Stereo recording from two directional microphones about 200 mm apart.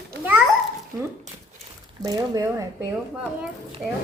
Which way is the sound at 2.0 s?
15° right (ahead or behind).